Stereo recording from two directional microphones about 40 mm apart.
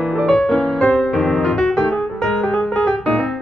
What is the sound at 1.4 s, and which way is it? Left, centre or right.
Music, centre.